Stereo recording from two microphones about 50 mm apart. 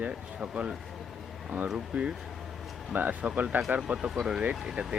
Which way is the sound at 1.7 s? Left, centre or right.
Right.